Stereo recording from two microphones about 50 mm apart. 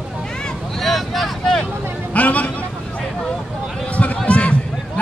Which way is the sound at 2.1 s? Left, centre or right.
Left.